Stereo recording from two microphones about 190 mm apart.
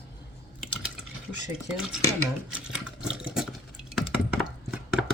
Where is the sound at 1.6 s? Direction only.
5° right (ahead or behind).